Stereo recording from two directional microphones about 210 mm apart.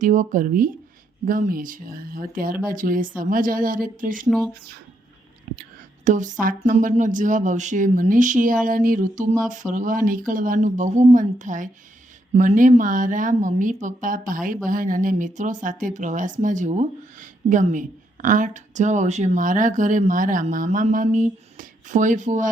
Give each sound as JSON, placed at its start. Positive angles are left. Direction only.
{"t": 0.0, "sound": "a woman's voice", "side_deg": -35}
{"t": 4.3, "sound": "speech", "side_deg": 0}
{"t": 5.5, "sound": "whispering", "side_deg": -40}
{"t": 6.1, "sound": "a woman's voice", "side_deg": -35}